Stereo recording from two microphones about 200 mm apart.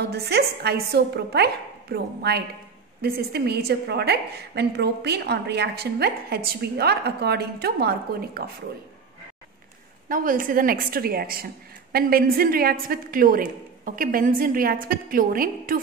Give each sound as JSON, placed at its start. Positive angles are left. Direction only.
{"t": 0.0, "sound": "a woman's voice", "side_deg": -55}
{"t": 10.0, "sound": "a woman's voice", "side_deg": -45}